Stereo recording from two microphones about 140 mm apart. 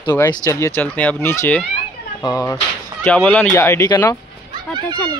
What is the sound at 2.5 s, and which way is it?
A child's voice, 10° left (ahead or behind).